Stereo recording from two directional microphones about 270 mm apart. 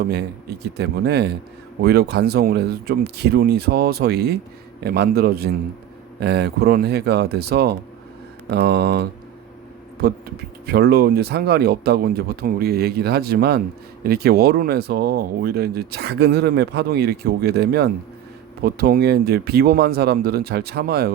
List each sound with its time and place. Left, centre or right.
0.8 s speech: right